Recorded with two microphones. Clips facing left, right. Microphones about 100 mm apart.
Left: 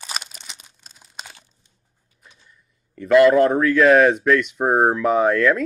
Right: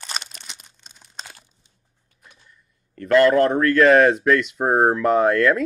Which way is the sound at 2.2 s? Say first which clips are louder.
Even; centre (ahead or behind).